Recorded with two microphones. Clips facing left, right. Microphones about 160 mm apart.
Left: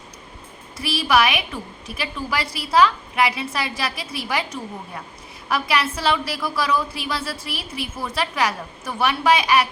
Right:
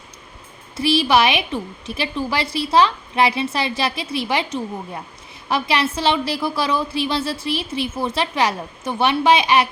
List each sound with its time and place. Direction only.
0.8 s a woman's voice: 25° right (ahead or behind)